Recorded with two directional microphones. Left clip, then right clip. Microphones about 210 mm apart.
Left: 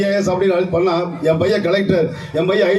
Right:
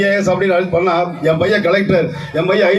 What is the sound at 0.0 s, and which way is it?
Speech, 30° right (ahead or behind).